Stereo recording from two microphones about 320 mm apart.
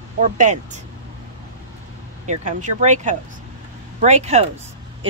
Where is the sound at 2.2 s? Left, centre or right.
Right.